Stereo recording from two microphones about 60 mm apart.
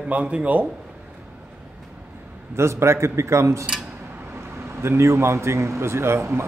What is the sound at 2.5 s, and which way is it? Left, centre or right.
A man's voice, right.